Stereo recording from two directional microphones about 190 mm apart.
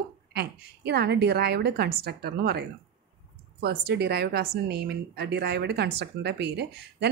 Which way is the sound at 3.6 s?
60° right (ahead or behind).